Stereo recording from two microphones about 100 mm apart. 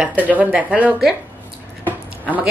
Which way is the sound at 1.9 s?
15° right (ahead or behind).